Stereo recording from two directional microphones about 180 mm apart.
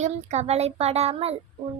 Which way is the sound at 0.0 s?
40° right (ahead or behind).